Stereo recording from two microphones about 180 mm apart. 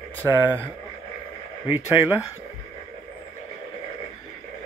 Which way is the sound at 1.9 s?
10° right (ahead or behind).